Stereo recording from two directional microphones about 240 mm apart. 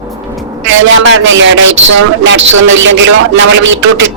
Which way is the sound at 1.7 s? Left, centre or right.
Right.